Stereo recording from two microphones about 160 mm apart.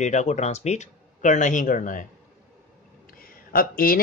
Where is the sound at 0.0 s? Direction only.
45° left (ahead or behind).